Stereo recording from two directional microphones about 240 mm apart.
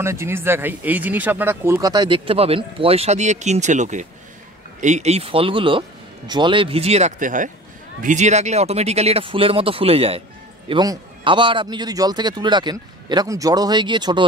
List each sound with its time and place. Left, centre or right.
0.0 s speech: centre